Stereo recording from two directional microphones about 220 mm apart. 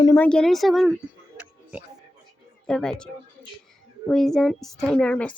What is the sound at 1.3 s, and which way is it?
Music, 5° right (ahead or behind).